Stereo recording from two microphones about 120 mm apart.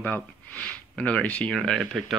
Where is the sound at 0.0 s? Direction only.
15° left (ahead or behind).